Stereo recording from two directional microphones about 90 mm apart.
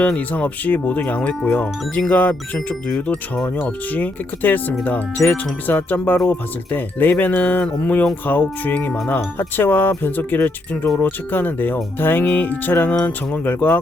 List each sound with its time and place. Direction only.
0.0 s speech: 15° left (ahead or behind)
3.4 s speech: 20° left (ahead or behind)